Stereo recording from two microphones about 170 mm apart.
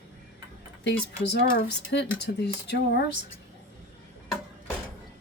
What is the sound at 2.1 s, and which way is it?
Speech, 85° left.